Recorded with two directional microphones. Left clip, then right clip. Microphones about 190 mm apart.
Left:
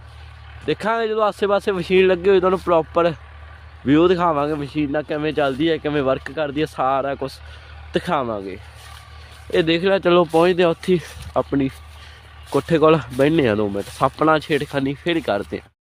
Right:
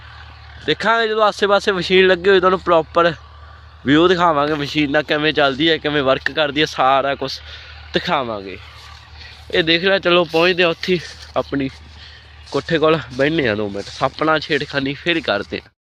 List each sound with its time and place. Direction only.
0.6 s speech: 5° left (ahead or behind)